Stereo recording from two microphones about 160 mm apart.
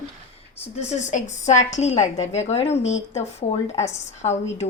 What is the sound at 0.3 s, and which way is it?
A woman's voice, 40° left (ahead or behind).